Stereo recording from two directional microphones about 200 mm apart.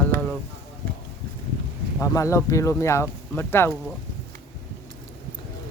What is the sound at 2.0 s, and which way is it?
Speech, 15° left (ahead or behind).